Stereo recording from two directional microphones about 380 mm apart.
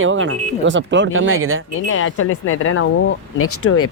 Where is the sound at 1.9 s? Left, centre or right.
Left.